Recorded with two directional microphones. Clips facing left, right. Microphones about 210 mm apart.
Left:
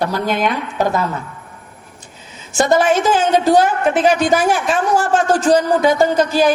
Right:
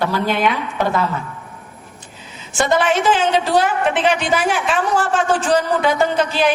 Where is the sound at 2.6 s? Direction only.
45° left (ahead or behind).